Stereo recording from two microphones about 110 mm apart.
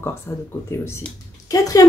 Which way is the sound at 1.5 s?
30° left (ahead or behind).